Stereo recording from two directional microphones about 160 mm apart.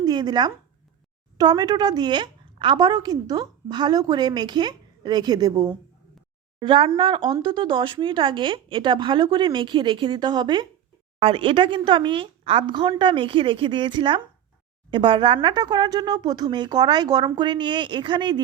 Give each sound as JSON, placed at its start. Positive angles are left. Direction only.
{"t": 0.0, "sound": "a woman's voice", "side_deg": -25}